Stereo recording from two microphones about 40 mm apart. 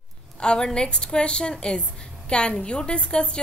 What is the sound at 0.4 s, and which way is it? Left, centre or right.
A woman's voice, left.